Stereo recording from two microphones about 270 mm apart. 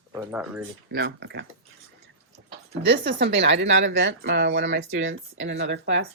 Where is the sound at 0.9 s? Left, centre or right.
Right.